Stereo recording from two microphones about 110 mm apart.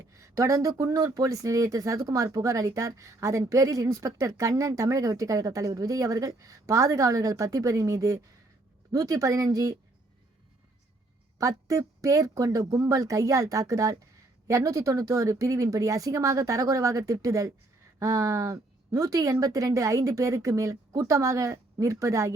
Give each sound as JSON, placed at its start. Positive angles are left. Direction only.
{"t": 0.0, "sound": "speech", "side_deg": -30}
{"t": 11.3, "sound": "speech", "side_deg": -30}